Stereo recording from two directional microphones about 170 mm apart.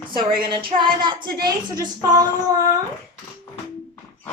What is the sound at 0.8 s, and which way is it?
Speech, 30° right (ahead or behind).